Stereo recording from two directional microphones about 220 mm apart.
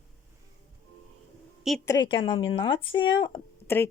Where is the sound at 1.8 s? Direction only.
15° left (ahead or behind).